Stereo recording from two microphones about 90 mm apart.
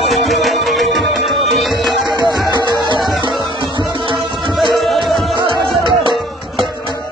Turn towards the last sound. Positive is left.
turn(degrees=-65)  # may be behind; listen again after turning